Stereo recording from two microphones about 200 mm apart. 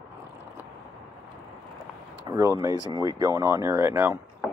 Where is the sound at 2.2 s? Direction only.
15° right (ahead or behind).